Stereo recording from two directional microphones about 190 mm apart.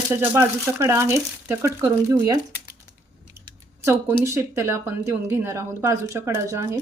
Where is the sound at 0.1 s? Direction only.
15° right (ahead or behind).